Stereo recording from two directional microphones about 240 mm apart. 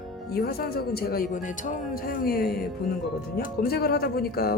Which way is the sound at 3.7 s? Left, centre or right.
Left.